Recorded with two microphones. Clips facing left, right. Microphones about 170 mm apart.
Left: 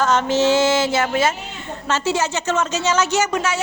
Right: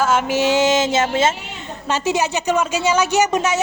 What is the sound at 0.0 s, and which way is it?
A woman's voice, 10° right (ahead or behind).